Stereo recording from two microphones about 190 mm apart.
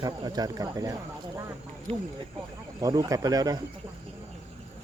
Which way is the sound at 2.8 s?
20° right (ahead or behind).